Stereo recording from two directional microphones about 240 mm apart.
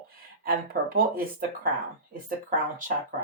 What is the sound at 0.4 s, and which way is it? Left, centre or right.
Speech, right.